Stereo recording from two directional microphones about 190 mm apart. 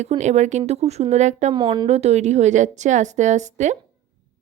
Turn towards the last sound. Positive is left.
turn(degrees=-40)  # may be behind; listen again after turning